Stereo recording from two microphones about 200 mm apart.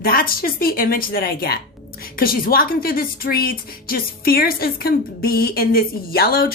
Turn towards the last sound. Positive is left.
turn(degrees=50)  # may be behind; listen again after turning